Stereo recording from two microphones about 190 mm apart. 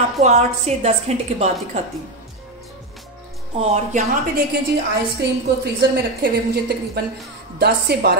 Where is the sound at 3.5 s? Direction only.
35° right (ahead or behind).